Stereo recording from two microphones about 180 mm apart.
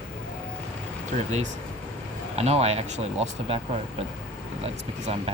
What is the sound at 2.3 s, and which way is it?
Speech, 35° right (ahead or behind).